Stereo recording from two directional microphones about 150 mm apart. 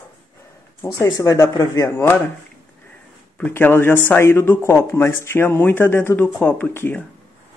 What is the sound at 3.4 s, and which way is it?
Speech, 15° left (ahead or behind).